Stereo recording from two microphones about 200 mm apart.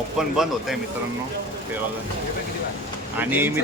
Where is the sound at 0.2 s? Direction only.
Centre (ahead or behind).